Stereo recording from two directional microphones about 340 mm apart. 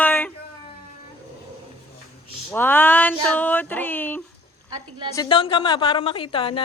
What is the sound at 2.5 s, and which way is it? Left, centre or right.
A woman's voice, centre.